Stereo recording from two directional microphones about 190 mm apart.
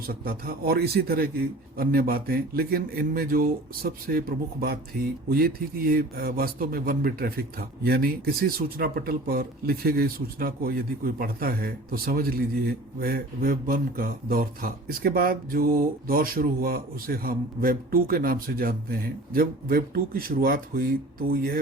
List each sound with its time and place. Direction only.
0.1 s speech: 50° right (ahead or behind)
5.9 s speech: 50° right (ahead or behind)